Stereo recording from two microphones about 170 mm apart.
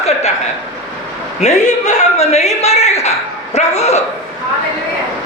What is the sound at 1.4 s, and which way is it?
Speech, 45° left (ahead or behind).